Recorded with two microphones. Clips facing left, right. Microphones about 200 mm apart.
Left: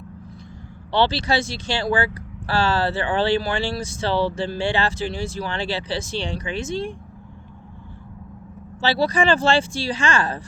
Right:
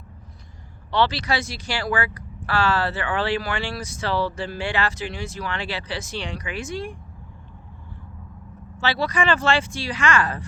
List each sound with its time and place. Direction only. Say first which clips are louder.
0.9 s speech: left 2 dB; 30° left (ahead or behind)
8.8 s speech: left 3 dB; 30° left (ahead or behind)